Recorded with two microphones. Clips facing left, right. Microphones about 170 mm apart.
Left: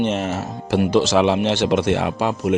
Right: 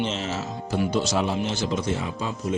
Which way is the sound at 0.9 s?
90° left.